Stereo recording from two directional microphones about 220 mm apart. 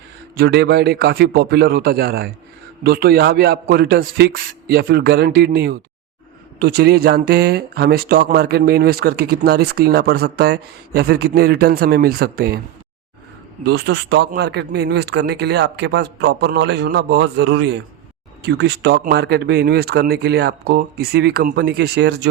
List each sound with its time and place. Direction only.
0.3 s speech: 45° right (ahead or behind)
13.7 s speech: 50° right (ahead or behind)